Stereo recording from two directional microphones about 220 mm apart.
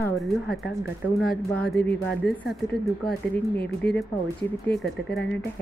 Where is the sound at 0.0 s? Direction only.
Centre (ahead or behind).